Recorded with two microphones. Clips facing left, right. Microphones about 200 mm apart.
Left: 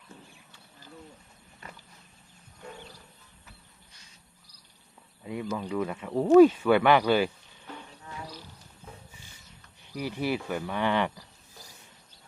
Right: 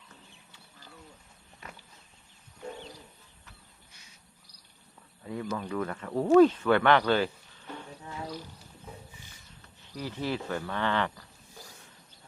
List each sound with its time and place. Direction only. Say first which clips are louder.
5.2 s speech: left 1 dB; 10° left (ahead or behind)
8.0 s a sound: right 2 dB; 25° right (ahead or behind)
9.8 s speech: left 3 dB; 15° left (ahead or behind)